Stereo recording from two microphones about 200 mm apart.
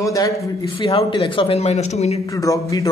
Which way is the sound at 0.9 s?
30° left (ahead or behind).